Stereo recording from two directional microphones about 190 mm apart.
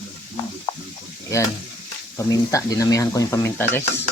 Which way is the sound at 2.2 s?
20° left (ahead or behind).